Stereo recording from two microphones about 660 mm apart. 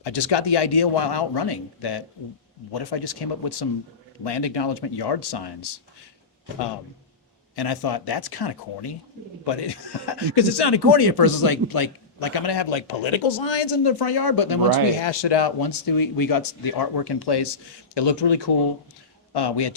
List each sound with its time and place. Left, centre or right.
0.0 s speech: left
7.5 s speech: left